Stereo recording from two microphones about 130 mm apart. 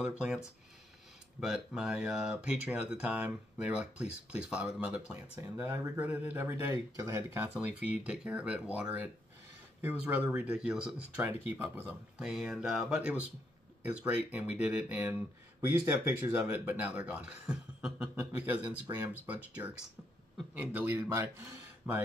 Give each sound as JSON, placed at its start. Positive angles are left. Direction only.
{"t": 1.4, "sound": "speech", "side_deg": -5}
{"t": 5.4, "sound": "speech", "side_deg": -20}
{"t": 6.6, "sound": "speech", "side_deg": -25}
{"t": 7.4, "sound": "speech", "side_deg": -10}
{"t": 10.3, "sound": "speech", "side_deg": -10}
{"t": 12.2, "sound": "speech", "side_deg": -5}